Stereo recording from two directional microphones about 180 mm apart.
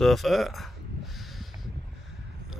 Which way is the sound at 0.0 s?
Centre (ahead or behind).